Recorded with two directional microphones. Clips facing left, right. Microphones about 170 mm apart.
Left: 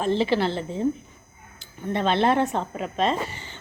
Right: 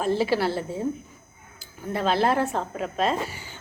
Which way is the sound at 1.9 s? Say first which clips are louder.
Left 1 dB; 5° right (ahead or behind).